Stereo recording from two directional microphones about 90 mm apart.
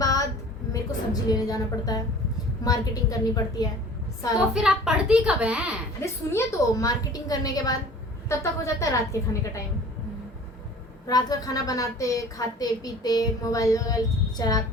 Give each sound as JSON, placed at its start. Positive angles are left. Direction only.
{"t": 0.0, "sound": "a sound", "side_deg": 40}
{"t": 0.7, "sound": "a woman's voice", "side_deg": 45}
{"t": 4.4, "sound": "a woman's voice", "side_deg": -10}
{"t": 6.0, "sound": "a woman's voice", "side_deg": 35}
{"t": 11.0, "sound": "a woman's voice", "side_deg": 45}